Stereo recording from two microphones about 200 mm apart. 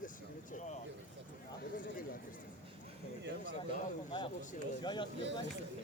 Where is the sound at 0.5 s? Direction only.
35° left (ahead or behind).